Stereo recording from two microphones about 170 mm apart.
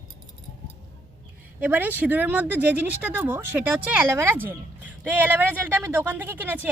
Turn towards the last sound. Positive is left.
turn(degrees=-10)  # may be behind; listen again after turning